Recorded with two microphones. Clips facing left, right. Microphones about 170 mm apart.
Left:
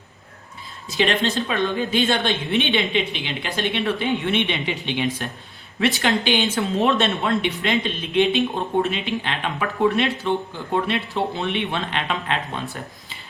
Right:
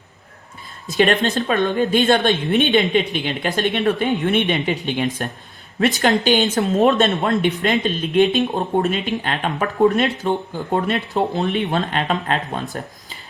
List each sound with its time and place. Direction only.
0.9 s speech: 45° right (ahead or behind)